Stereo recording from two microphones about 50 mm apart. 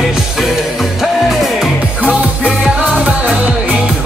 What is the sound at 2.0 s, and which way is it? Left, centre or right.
Music, right.